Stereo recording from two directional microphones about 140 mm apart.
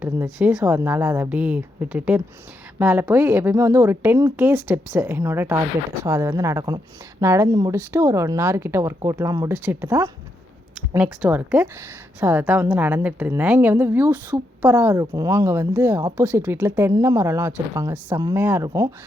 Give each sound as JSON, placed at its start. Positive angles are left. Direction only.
{"t": 0.0, "sound": "a woman's voice", "side_deg": -10}
{"t": 9.5, "sound": "a woman's voice", "side_deg": -15}